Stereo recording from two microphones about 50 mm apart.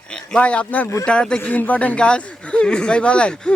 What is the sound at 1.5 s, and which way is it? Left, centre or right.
Speech, left.